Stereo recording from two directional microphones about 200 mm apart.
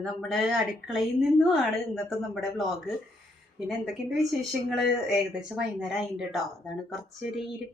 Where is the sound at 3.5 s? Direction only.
Centre (ahead or behind).